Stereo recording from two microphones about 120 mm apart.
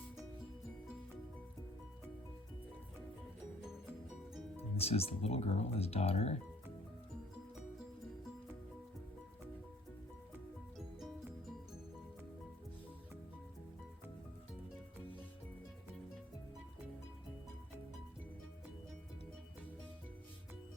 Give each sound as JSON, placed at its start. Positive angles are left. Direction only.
{"t": 4.8, "sound": "speech", "side_deg": 55}